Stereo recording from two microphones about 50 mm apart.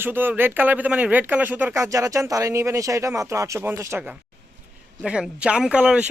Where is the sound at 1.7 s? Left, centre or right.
Right.